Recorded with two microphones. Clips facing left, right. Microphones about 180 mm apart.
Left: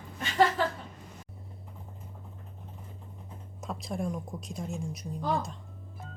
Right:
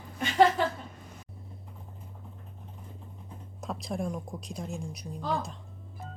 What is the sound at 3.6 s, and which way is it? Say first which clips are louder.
Speech: right 1 dB; centre (ahead or behind).